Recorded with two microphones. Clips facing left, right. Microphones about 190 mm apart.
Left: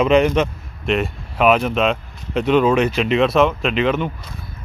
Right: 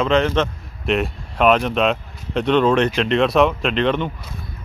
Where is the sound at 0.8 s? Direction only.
Centre (ahead or behind).